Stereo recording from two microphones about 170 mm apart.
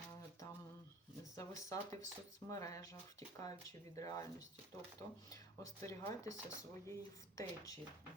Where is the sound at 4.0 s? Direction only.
20° left (ahead or behind).